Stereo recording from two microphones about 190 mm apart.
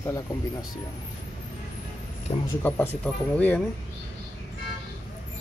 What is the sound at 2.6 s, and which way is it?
Speech, 5° left (ahead or behind).